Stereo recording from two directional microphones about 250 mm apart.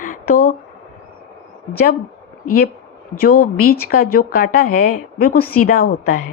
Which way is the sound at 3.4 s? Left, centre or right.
Left.